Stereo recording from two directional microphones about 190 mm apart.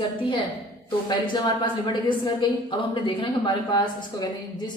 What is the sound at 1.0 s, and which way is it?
A woman's voice, 20° left (ahead or behind).